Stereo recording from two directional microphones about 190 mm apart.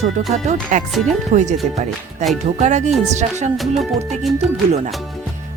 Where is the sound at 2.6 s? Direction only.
40° right (ahead or behind).